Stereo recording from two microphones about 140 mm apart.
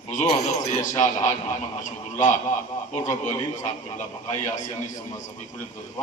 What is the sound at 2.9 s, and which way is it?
Speech, 60° left (ahead or behind).